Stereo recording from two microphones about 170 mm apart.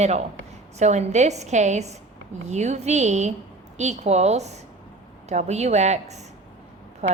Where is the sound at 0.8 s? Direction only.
40° right (ahead or behind).